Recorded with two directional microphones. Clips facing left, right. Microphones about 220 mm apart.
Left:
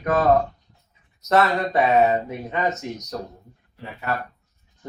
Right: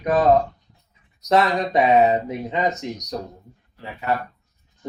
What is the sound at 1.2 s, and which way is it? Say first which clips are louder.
Speech: right 1 dB; 15° right (ahead or behind).